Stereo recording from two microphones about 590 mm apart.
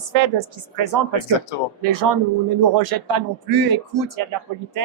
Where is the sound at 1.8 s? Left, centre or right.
Right.